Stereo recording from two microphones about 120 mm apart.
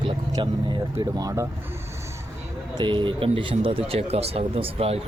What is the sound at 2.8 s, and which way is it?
Speech, 40° right (ahead or behind).